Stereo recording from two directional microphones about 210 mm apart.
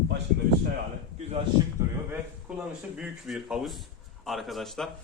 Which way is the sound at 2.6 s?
5° right (ahead or behind).